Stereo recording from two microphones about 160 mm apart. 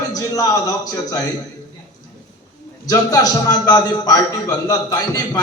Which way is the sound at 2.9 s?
20° left (ahead or behind).